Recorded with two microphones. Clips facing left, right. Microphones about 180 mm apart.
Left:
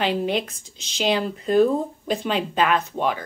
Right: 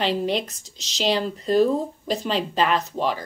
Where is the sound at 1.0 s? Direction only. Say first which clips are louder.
Even; 5° left (ahead or behind).